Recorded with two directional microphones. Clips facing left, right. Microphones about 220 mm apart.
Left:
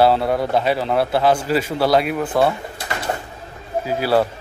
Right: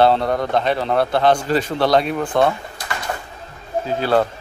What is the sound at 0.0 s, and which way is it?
A man's voice, 5° left (ahead or behind).